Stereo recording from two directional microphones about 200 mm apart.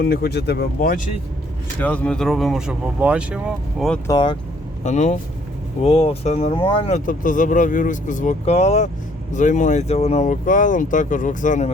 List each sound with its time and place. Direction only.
0.0 s speech: 50° left (ahead or behind)
1.8 s speech: 5° left (ahead or behind)
4.0 s speech: 20° left (ahead or behind)
4.8 s speech: 35° left (ahead or behind)